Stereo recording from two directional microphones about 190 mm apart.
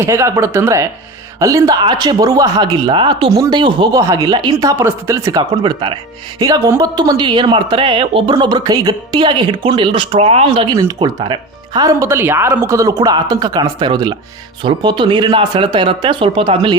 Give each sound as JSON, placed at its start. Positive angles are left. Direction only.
{"t": 0.0, "sound": "speech", "side_deg": -15}